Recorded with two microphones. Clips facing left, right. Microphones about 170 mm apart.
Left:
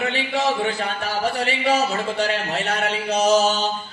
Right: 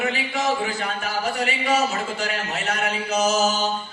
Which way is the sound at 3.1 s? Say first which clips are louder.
Left 3 dB; 30° left (ahead or behind).